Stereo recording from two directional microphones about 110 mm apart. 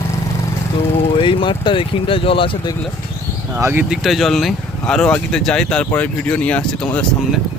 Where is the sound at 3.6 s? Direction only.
20° right (ahead or behind).